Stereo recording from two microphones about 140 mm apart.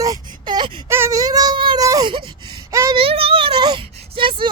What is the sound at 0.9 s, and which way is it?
Speech, 20° right (ahead or behind).